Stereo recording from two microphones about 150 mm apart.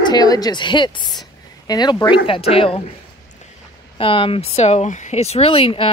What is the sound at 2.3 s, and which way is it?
Speech, 40° left (ahead or behind).